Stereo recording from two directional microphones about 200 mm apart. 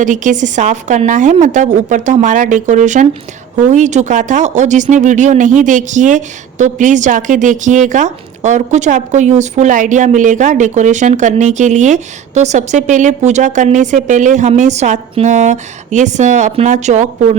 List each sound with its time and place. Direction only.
0.0 s speech: 40° right (ahead or behind)